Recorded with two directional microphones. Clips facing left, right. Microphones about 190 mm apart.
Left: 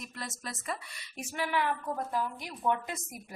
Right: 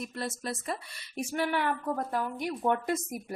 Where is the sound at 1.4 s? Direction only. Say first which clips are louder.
Right 1 dB; 50° right (ahead or behind).